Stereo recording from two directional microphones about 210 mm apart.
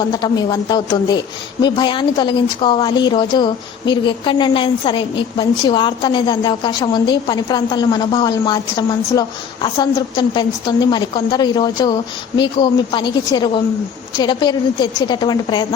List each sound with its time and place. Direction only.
0.1 s speech: 20° left (ahead or behind)